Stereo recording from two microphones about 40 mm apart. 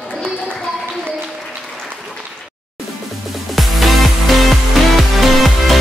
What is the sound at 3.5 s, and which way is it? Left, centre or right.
Music, centre.